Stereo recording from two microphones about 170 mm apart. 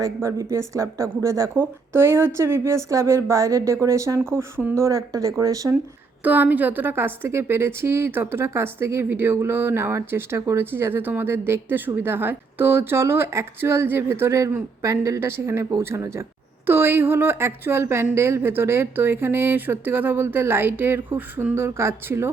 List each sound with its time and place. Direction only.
0.0 s speech: 20° right (ahead or behind)